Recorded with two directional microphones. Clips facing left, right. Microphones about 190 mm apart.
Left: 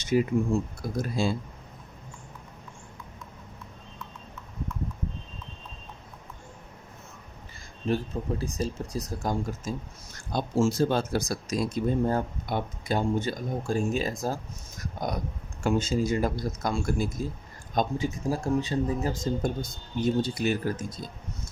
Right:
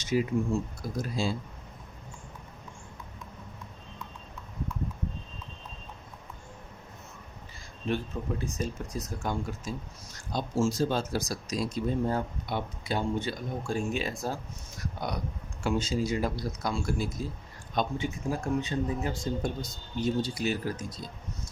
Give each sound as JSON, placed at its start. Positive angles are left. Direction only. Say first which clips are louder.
{"t": 0.0, "sound": "speech", "louder": "left 3 dB", "side_deg": 50}
{"t": 7.9, "sound": "speech", "louder": "left 3 dB", "side_deg": 35}
{"t": 10.3, "sound": "speech", "louder": "left 3 dB", "side_deg": 60}
{"t": 14.8, "sound": "a sound", "louder": "left 3 dB", "side_deg": 45}
{"t": 15.6, "sound": "speech", "louder": "left 3 dB", "side_deg": 50}
{"t": 17.7, "sound": "speech", "louder": "left 3 dB", "side_deg": 40}
{"t": 20.0, "sound": "speech", "louder": "left 3 dB", "side_deg": 55}